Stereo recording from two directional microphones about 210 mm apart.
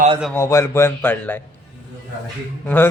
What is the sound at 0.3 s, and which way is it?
Speech, 15° left (ahead or behind).